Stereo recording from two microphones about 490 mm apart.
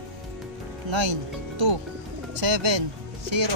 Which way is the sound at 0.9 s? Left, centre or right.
Right.